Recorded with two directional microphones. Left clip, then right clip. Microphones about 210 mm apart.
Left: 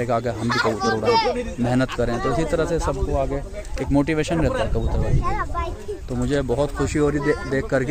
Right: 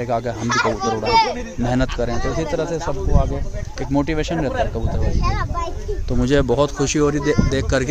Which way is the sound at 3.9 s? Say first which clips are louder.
Even; centre (ahead or behind).